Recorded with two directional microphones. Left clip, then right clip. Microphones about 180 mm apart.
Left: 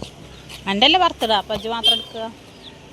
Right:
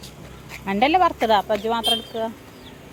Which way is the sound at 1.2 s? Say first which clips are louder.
Right 1 dB; 15° right (ahead or behind).